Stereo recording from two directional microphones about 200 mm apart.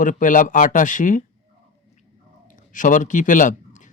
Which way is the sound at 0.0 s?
40° left (ahead or behind).